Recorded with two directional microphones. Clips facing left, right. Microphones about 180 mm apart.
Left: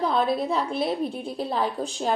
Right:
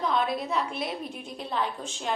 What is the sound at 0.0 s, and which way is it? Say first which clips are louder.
A woman's voice: left 4 dB; 35° left (ahead or behind).